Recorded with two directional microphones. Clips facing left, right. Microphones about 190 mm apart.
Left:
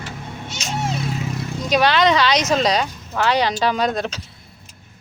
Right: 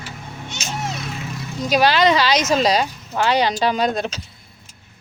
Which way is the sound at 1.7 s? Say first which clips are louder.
Even; 5° right (ahead or behind).